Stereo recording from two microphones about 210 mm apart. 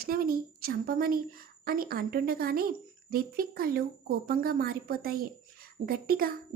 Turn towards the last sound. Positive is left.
turn(degrees=-45)  # may be behind; listen again after turning